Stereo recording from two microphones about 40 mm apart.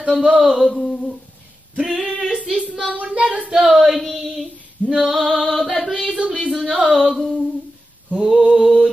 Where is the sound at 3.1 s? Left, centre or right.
Right.